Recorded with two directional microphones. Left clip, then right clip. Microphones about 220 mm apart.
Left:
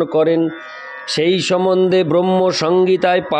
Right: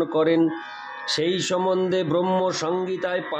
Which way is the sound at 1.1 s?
35° left (ahead or behind).